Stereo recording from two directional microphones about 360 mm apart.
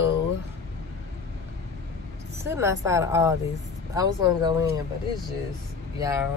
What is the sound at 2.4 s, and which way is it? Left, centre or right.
Speech, centre.